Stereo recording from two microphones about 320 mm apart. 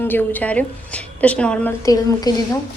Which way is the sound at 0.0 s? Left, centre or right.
Centre.